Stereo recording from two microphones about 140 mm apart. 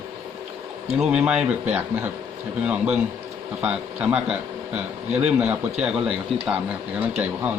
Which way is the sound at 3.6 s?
10° right (ahead or behind).